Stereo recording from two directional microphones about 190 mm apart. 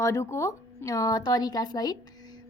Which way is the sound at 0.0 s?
15° left (ahead or behind).